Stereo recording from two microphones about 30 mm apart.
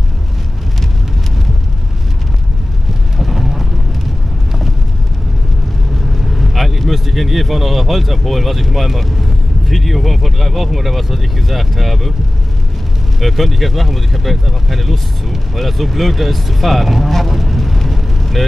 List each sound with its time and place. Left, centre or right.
3.2 s a sound: centre
6.1 s speech: centre
13.2 s speech: centre
17.3 s vehicle: centre